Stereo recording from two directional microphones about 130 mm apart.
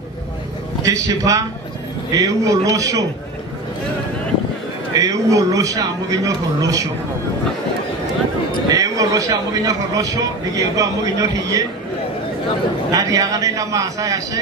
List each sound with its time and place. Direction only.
0.8 s speech: 25° right (ahead or behind)
4.9 s speech: 25° right (ahead or behind)
8.6 s speech: 25° right (ahead or behind)
12.9 s speech: 25° right (ahead or behind)